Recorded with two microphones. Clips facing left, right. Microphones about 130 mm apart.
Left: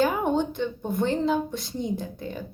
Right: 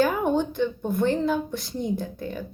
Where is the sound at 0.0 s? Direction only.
20° left (ahead or behind).